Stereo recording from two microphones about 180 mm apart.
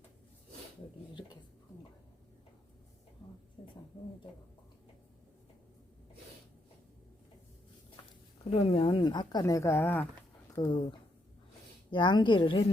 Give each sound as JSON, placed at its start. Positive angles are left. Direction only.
{"t": 3.6, "sound": "a sound", "side_deg": 30}
{"t": 8.4, "sound": "speech", "side_deg": 30}
{"t": 10.5, "sound": "speech", "side_deg": 20}
{"t": 11.9, "sound": "speech", "side_deg": 25}